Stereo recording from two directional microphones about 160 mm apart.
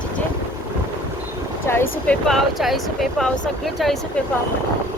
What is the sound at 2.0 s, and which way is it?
Speech, 5° left (ahead or behind).